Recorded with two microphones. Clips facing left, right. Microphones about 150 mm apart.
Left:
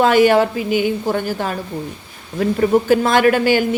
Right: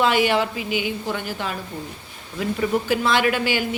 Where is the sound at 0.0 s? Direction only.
45° left (ahead or behind).